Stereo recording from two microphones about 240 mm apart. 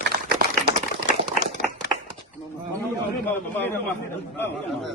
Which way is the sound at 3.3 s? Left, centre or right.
Centre.